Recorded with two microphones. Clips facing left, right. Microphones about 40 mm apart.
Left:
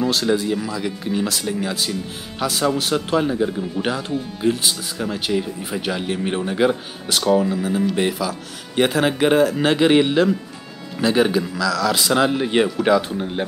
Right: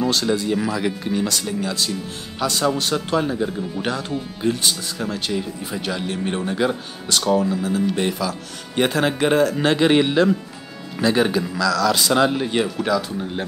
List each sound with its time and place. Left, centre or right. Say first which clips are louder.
0.0 s speech: left 1 dB; centre
0.5 s speech: right 2 dB; centre
1.1 s speech: even; centre
12.4 s speech: left 3 dB; centre
12.8 s speech: left 4 dB; left